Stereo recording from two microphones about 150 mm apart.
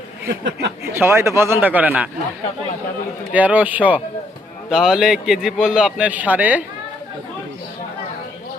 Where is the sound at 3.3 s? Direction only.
10° right (ahead or behind).